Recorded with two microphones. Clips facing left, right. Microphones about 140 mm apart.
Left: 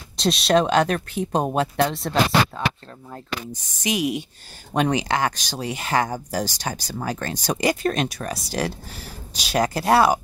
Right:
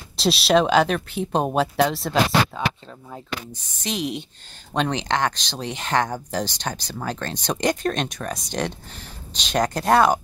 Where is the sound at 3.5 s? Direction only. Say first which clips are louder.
Left 6 dB; 10° left (ahead or behind).